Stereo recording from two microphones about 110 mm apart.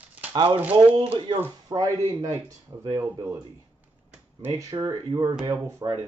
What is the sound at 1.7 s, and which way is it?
Speech, 30° right (ahead or behind).